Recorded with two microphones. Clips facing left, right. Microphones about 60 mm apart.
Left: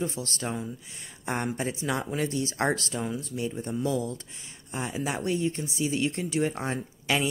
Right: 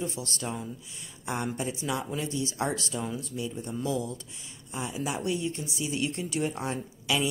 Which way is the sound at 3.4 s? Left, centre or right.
Left.